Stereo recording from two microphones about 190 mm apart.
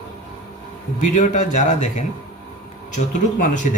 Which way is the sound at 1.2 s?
40° left (ahead or behind).